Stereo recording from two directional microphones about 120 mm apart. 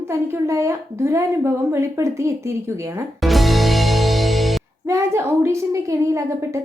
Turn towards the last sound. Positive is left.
turn(degrees=-25)  # may be behind; listen again after turning